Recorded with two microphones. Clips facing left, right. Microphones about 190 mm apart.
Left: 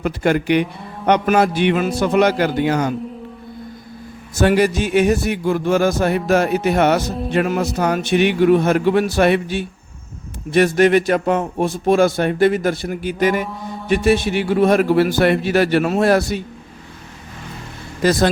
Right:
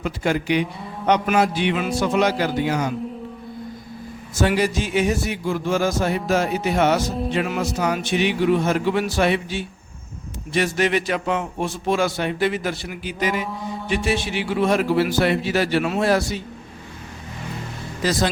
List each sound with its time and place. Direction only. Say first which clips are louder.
0.0 s a man's voice: left 5 dB; 60° left (ahead or behind)
4.4 s a man's voice: left 5 dB; 60° left (ahead or behind)
13.5 s mantra: even; centre (ahead or behind)
13.9 s a man's voice: left 7 dB; 55° left (ahead or behind)
18.0 s a man's voice: left 6 dB; 55° left (ahead or behind)